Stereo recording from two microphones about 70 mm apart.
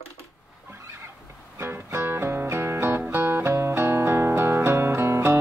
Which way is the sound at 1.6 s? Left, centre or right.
Right.